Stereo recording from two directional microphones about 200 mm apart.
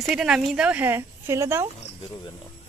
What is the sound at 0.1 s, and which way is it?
Speech, 5° right (ahead or behind).